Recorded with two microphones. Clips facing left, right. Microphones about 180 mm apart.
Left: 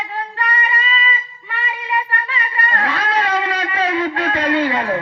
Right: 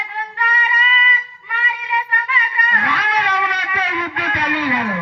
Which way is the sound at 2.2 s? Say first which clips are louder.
Even; 30° left (ahead or behind).